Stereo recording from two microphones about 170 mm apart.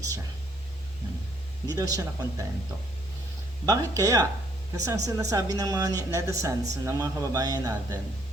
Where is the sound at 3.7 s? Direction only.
20° right (ahead or behind).